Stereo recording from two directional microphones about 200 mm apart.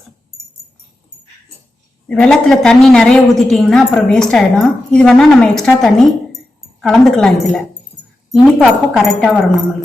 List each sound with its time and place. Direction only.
2.0 s a woman's voice: 5° left (ahead or behind)